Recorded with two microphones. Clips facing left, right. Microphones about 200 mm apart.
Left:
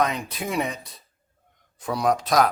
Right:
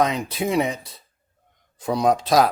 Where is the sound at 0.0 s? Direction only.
25° right (ahead or behind).